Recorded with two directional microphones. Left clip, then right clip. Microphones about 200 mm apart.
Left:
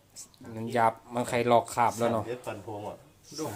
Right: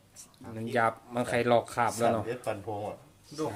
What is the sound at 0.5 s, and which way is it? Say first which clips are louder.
Speech: left 2 dB; 5° left (ahead or behind).